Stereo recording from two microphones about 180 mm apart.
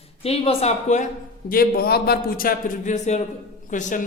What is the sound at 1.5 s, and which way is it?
A man's voice, 55° left (ahead or behind).